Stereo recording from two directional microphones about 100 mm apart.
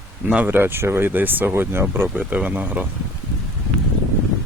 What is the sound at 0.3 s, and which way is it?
Speech, 15° right (ahead or behind).